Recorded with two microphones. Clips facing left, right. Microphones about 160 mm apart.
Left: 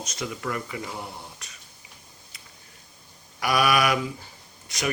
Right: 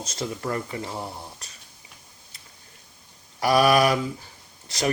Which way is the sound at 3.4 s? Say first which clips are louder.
Right 4 dB; 35° right (ahead or behind).